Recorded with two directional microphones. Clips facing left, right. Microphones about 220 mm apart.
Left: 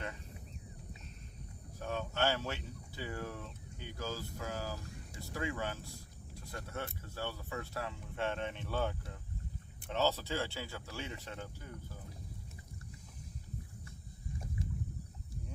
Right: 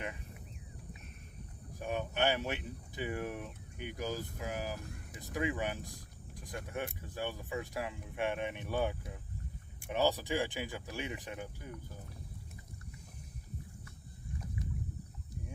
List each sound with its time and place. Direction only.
1.8 s speech: 15° right (ahead or behind)